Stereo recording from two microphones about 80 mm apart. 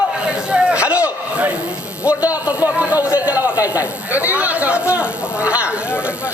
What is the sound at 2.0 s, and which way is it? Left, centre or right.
A man's voice, centre.